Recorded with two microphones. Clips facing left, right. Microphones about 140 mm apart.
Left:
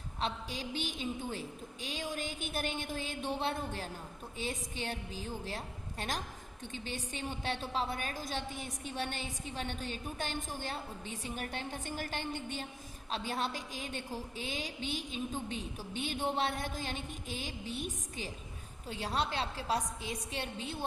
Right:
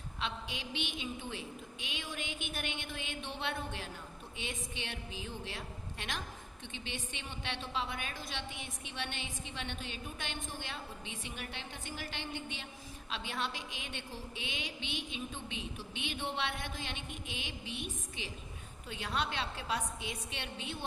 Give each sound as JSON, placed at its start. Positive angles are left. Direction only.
{"t": 0.2, "sound": "a woman's voice", "side_deg": 40}